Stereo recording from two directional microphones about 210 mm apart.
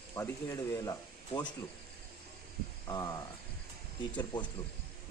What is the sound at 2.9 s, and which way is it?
Cricket, 20° left (ahead or behind).